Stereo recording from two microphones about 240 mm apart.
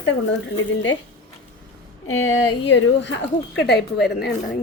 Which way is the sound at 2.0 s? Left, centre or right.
Left.